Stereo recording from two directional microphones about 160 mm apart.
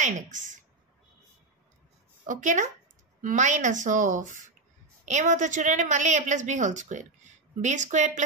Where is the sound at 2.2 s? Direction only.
50° right (ahead or behind).